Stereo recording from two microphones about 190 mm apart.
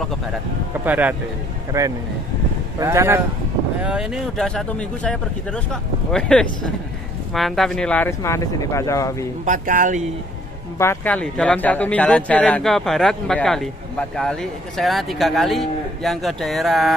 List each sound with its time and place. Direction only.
0.8 s speech: 10° right (ahead or behind)
3.8 s speech: 5° right (ahead or behind); by 9.3 s 15° left (ahead or behind)
9.4 s speech: 45° right (ahead or behind)
10.8 s speech: 10° left (ahead or behind)